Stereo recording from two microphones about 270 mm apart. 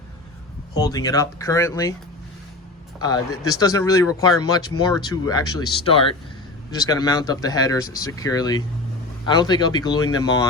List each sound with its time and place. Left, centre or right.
0.8 s speech: centre
3.5 s speech: centre